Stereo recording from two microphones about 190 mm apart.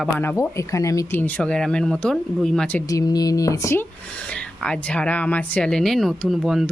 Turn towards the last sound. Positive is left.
turn(degrees=0)  # may be behind; listen again after turning